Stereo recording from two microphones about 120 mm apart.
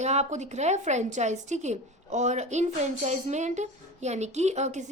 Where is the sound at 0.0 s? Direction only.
70° right (ahead or behind).